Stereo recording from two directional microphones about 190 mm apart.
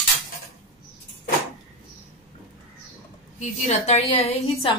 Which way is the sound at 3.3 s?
35° left (ahead or behind).